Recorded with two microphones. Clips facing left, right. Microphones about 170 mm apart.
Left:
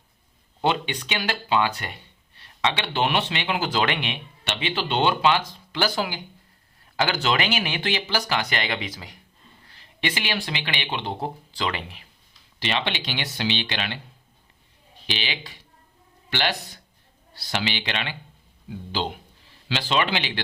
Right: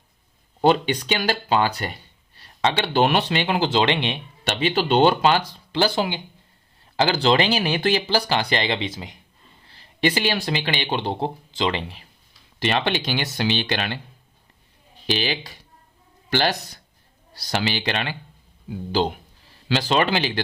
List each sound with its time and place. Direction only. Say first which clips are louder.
0.6 s speech: right 6 dB; 40° right (ahead or behind)
3.7 s speech: right 4 dB; 25° right (ahead or behind)
9.6 s speech: right 7 dB; 35° right (ahead or behind)
11.2 s speech: right 4 dB; 25° right (ahead or behind)
12.5 s speech: right 5 dB; 45° right (ahead or behind)
15.0 s a man's voice: right 7 dB; 40° right (ahead or behind)